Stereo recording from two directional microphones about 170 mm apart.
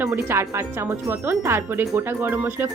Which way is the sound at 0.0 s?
15° right (ahead or behind).